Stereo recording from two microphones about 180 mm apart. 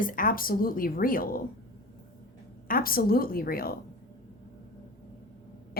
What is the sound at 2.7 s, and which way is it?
Speech, 55° left (ahead or behind).